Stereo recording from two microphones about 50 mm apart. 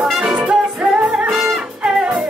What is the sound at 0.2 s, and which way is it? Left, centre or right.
Music, centre.